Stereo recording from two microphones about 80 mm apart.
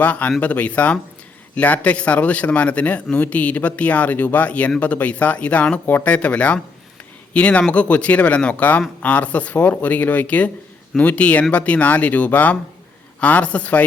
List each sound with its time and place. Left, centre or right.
0.0 s a man's voice: centre